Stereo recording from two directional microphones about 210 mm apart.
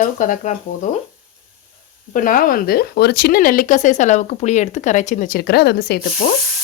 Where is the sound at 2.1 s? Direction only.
40° left (ahead or behind).